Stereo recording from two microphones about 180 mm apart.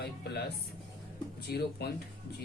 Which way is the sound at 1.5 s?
60° left (ahead or behind).